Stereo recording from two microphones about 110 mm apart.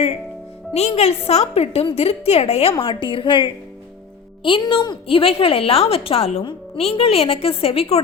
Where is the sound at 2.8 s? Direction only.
50° left (ahead or behind).